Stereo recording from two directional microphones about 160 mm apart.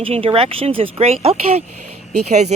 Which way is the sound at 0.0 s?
35° right (ahead or behind).